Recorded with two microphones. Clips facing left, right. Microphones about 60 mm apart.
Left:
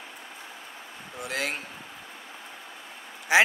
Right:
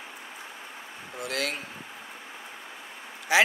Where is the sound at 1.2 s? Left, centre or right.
Left.